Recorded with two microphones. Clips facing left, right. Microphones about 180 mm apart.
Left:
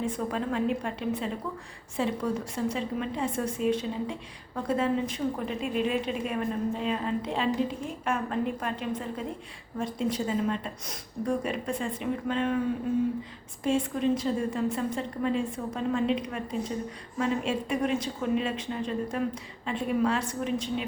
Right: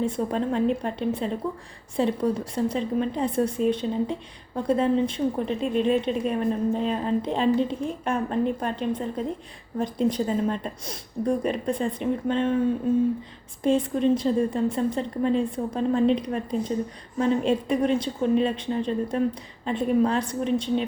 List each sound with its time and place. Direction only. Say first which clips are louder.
0.0 s speech: right 5 dB; 30° right (ahead or behind)
13.7 s speech: right 5 dB; 35° right (ahead or behind)